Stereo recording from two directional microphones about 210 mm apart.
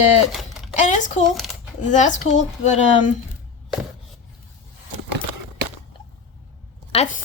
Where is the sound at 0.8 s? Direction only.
35° left (ahead or behind).